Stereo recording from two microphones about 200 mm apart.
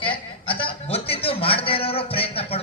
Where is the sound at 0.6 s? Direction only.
30° left (ahead or behind).